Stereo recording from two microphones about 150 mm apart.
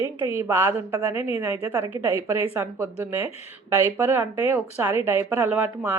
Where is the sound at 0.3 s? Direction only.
20° right (ahead or behind).